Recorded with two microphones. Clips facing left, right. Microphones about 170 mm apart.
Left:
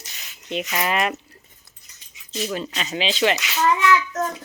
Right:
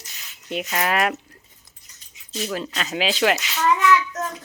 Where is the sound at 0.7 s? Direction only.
Centre (ahead or behind).